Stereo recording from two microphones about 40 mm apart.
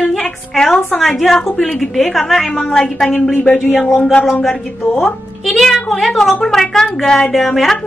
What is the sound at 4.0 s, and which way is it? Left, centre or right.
Speech, centre.